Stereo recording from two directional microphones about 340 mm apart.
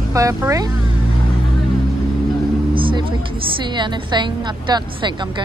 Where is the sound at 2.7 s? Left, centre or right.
Centre.